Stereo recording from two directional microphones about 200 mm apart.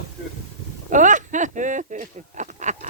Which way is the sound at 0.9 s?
40° right (ahead or behind).